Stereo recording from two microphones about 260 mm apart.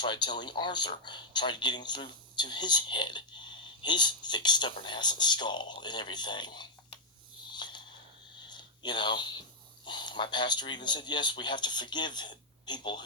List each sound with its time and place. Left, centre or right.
0.0 s speech: centre
7.5 s a sound: centre
9.8 s speech: centre